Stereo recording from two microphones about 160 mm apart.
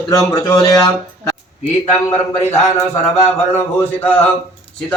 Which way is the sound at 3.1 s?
15° left (ahead or behind).